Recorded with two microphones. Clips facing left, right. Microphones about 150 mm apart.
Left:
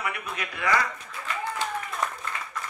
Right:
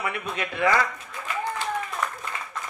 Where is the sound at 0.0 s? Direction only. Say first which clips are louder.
Right 3 dB; 30° right (ahead or behind).